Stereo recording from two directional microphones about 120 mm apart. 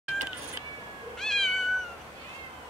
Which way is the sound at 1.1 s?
5° left (ahead or behind).